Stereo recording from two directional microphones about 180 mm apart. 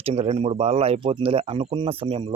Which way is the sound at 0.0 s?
35° right (ahead or behind).